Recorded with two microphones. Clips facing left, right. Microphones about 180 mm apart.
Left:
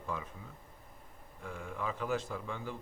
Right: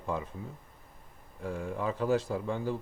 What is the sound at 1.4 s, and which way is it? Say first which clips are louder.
A man's voice: right 6 dB; 35° right (ahead or behind).